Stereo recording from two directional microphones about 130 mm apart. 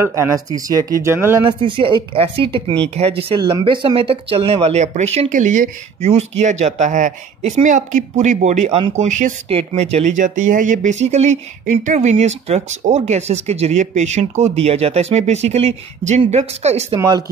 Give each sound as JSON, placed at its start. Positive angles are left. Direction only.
{"t": 0.0, "sound": "speech", "side_deg": -20}
{"t": 1.6, "sound": "speech", "side_deg": -40}
{"t": 3.3, "sound": "speech", "side_deg": -35}
{"t": 5.3, "sound": "speech", "side_deg": -75}
{"t": 5.9, "sound": "speech", "side_deg": -55}
{"t": 9.5, "sound": "speech", "side_deg": -50}